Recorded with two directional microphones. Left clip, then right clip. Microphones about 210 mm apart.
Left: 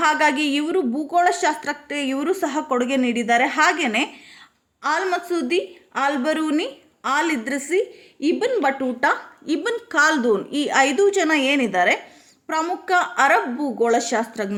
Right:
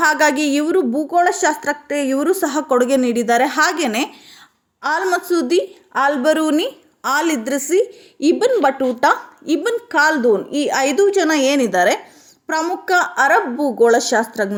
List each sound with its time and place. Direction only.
0.0 s a woman's voice: 20° right (ahead or behind)